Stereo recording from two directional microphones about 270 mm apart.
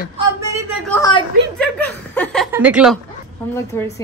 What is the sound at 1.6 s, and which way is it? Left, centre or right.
Chuckle, centre.